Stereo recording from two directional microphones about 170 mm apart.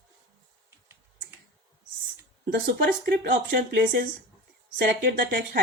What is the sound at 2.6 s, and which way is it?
Speech, 65° right (ahead or behind).